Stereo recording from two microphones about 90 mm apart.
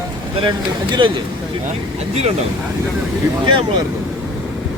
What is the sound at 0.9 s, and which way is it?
Speech, 65° right (ahead or behind).